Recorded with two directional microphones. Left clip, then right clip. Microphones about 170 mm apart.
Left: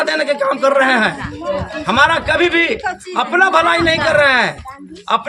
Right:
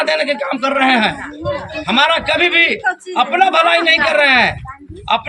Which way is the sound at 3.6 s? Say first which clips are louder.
Right 2 dB; centre (ahead or behind).